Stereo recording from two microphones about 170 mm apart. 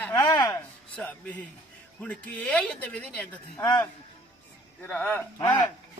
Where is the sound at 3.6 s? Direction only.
20° left (ahead or behind).